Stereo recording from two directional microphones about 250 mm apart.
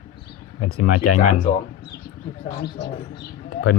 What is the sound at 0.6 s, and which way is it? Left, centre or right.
Speech, left.